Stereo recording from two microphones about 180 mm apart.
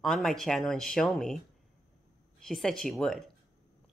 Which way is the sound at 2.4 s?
Centre (ahead or behind).